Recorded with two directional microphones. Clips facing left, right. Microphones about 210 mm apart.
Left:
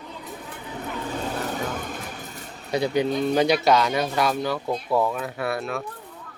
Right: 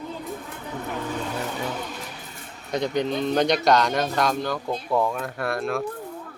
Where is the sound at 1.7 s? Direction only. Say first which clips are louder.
Left 1 dB; 50° left (ahead or behind).